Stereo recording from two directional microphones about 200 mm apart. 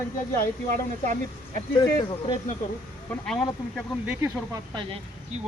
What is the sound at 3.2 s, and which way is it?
Speech, 5° left (ahead or behind).